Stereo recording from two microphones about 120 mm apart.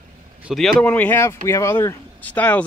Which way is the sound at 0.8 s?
15° left (ahead or behind).